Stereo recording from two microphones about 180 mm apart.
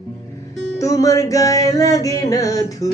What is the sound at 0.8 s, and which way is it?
Music, 20° left (ahead or behind).